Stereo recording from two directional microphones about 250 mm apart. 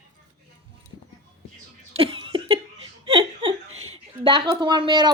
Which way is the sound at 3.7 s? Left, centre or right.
Right.